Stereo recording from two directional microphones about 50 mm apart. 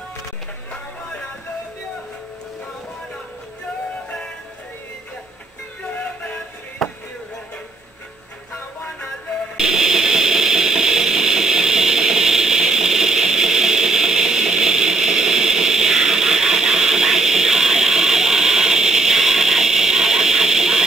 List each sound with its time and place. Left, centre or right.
5.9 s music: left
6.8 s chop: centre
9.6 s a sound: centre